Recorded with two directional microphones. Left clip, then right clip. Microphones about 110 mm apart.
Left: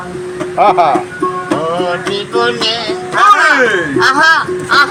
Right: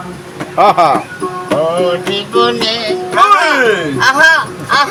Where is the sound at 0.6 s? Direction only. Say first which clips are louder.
Right 1 dB; 55° right (ahead or behind).